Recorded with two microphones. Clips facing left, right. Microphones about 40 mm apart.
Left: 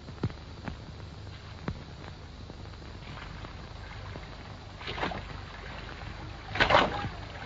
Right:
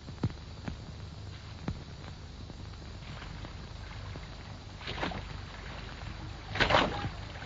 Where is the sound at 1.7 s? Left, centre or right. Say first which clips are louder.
Left 2 dB; centre.